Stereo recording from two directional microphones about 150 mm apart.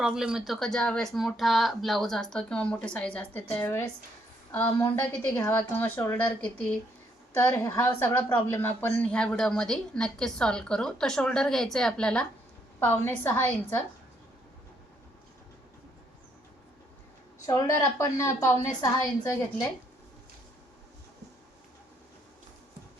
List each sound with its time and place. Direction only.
0.0 s a woman's voice: 5° right (ahead or behind)
7.3 s a woman's voice: 20° left (ahead or behind)
17.4 s a woman's voice: 20° left (ahead or behind)